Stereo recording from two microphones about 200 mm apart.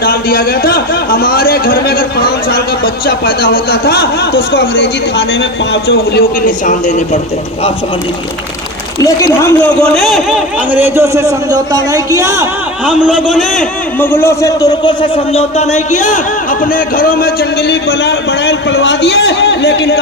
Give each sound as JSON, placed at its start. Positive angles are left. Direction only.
{"t": 0.0, "sound": "a man's voice", "side_deg": 45}
{"t": 5.7, "sound": "a man's voice", "side_deg": 65}
{"t": 6.4, "sound": "speech", "side_deg": 40}
{"t": 9.0, "sound": "a man's voice", "side_deg": 15}
{"t": 12.8, "sound": "a man's voice", "side_deg": -5}
{"t": 14.0, "sound": "a man's voice", "side_deg": 10}